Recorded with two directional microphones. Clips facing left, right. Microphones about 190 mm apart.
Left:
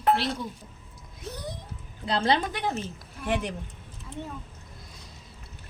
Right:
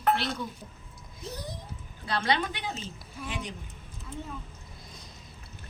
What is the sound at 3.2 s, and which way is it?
Speech, 65° left (ahead or behind).